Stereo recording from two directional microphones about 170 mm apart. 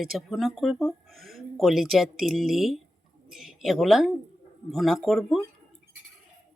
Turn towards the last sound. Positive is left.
turn(degrees=0)  # may be behind; listen again after turning